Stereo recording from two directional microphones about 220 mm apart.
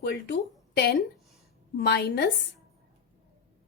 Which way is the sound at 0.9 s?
Centre (ahead or behind).